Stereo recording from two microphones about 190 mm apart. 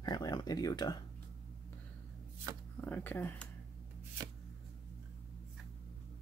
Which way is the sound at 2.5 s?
20° right (ahead or behind).